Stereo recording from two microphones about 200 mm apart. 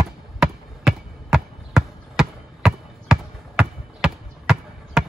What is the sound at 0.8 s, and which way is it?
Basketball bounce, centre (ahead or behind).